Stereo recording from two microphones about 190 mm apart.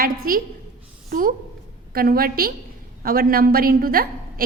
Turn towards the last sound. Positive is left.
turn(degrees=-50)  # may be behind; listen again after turning